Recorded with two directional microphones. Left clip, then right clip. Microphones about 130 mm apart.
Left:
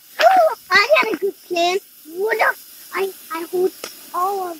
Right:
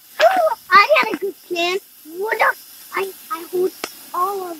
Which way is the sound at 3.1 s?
20° right (ahead or behind).